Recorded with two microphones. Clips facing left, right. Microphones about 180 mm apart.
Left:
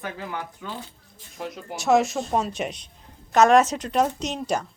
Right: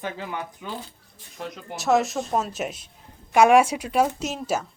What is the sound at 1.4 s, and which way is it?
Speech, centre (ahead or behind).